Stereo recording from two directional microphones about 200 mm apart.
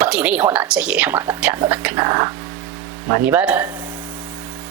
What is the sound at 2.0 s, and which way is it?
A woman's voice, 20° right (ahead or behind).